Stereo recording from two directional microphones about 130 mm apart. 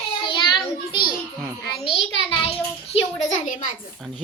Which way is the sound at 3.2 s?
75° left (ahead or behind).